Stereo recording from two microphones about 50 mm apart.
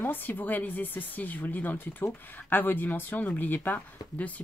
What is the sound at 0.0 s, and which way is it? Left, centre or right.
Speech, left.